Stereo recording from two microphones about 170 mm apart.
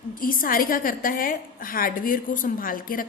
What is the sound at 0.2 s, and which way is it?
A woman's voice, 55° left (ahead or behind).